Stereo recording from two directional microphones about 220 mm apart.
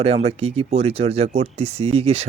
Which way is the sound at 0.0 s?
25° right (ahead or behind).